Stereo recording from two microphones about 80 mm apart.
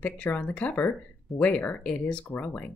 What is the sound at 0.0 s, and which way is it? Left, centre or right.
Speech, centre.